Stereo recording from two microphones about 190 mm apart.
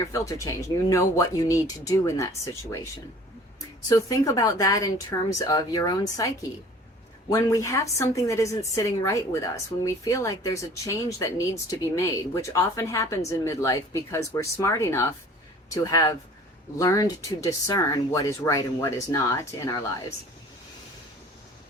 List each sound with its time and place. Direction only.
0.0 s speech: 15° left (ahead or behind)
3.8 s speech: 15° left (ahead or behind)